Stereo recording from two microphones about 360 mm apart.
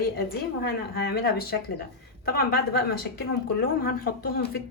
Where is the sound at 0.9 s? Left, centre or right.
Left.